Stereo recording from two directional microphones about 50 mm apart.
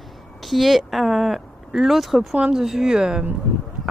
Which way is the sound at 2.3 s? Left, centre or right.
Centre.